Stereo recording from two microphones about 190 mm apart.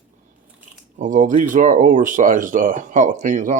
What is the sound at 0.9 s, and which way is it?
Speech, 40° right (ahead or behind).